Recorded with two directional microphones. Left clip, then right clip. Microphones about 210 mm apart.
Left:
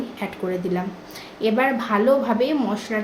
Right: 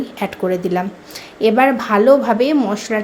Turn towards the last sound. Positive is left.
turn(degrees=-35)  # may be behind; listen again after turning